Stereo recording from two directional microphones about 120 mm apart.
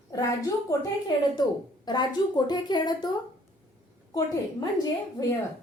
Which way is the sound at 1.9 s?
35° left (ahead or behind).